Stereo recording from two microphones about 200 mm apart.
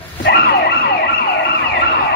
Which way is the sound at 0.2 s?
55° left (ahead or behind).